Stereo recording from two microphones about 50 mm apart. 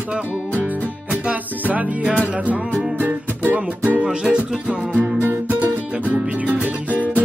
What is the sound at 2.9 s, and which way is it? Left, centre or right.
Music, right.